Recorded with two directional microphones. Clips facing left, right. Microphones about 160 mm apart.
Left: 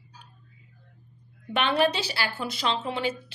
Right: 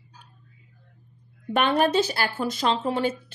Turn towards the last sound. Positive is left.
turn(degrees=-45)  # may be behind; listen again after turning